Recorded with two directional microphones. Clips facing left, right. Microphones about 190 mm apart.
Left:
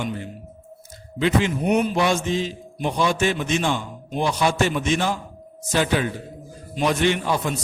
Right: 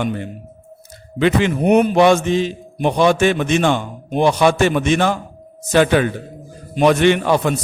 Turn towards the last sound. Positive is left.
turn(degrees=-70)  # may be behind; listen again after turning